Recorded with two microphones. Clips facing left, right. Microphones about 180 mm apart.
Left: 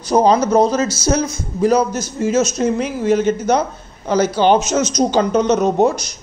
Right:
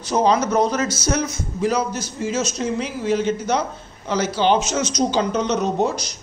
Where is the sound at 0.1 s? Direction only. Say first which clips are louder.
Left 5 dB; 35° left (ahead or behind).